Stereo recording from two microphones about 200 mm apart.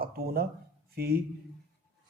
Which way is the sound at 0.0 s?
50° right (ahead or behind).